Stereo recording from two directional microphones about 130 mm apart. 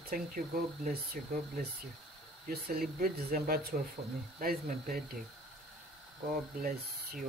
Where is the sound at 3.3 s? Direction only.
90° right.